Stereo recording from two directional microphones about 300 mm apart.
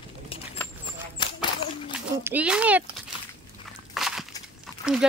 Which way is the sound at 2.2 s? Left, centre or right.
Centre.